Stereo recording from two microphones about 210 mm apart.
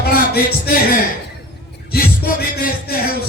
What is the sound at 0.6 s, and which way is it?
A man's voice, 45° left (ahead or behind).